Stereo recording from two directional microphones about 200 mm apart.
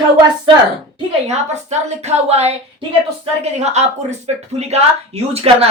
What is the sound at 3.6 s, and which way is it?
Speech, 35° right (ahead or behind).